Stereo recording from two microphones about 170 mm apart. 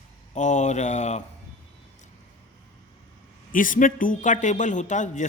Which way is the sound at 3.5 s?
50° left (ahead or behind).